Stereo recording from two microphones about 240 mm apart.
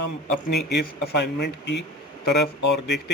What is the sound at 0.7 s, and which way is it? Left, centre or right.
Speech, left.